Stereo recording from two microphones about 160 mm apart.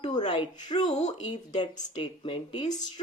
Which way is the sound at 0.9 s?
45° left (ahead or behind).